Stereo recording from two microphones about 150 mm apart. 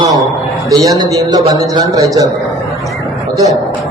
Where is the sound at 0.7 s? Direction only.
25° right (ahead or behind).